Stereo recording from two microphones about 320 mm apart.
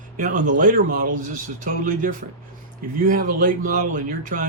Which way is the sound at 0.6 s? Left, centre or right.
Right.